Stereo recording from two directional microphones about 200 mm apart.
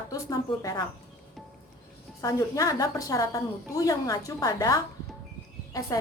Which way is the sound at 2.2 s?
15° left (ahead or behind).